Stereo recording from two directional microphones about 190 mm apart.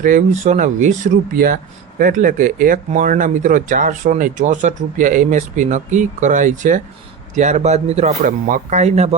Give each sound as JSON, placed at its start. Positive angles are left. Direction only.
{"t": 0.0, "sound": "speech", "side_deg": -45}